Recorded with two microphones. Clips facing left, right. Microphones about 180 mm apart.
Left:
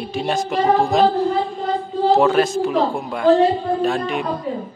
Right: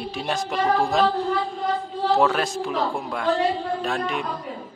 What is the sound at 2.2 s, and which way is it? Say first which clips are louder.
Speech: left 6 dB; centre (ahead or behind).